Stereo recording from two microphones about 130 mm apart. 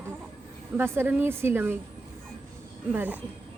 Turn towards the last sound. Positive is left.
turn(degrees=-10)  # may be behind; listen again after turning